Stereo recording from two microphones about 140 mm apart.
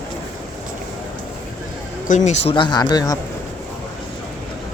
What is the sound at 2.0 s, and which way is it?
Speech, 60° left (ahead or behind).